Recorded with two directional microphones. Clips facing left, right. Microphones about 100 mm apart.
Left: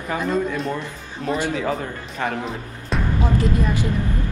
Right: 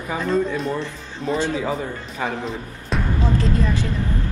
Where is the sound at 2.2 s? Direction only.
10° right (ahead or behind).